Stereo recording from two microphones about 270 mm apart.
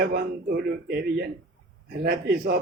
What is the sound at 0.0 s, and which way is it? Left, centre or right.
A man's voice, right.